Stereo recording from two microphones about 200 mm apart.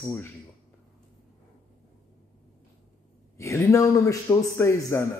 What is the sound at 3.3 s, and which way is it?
A man's voice, 15° left (ahead or behind).